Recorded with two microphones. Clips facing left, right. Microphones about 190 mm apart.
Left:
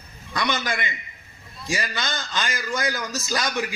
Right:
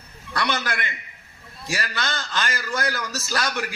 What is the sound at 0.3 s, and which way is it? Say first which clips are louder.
A man's voice: even; 15° left (ahead or behind).